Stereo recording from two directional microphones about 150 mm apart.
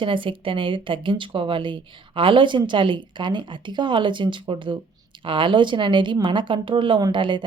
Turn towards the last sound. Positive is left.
turn(degrees=-30)  # may be behind; listen again after turning